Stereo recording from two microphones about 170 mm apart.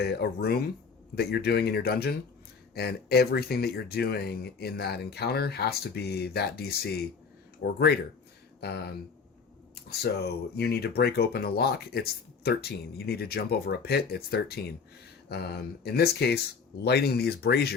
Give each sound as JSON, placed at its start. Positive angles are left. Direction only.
{"t": 0.0, "sound": "speech", "side_deg": 70}
{"t": 10.0, "sound": "speech", "side_deg": 70}